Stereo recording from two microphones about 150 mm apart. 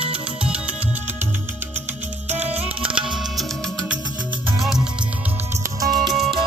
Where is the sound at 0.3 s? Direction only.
5° right (ahead or behind).